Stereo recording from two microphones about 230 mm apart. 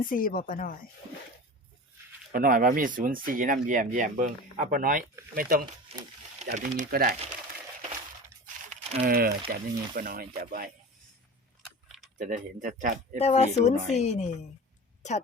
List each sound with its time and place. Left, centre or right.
0.1 s speech: left
2.3 s speech: right
5.9 s speech: right
8.9 s speech: right
11.6 s biting: centre
12.2 s speech: right
13.1 s speech: left